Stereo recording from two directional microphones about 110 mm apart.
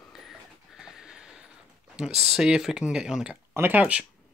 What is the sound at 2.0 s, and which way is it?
Speech, 5° right (ahead or behind).